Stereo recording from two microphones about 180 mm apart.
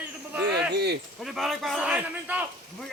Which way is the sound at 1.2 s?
Centre (ahead or behind).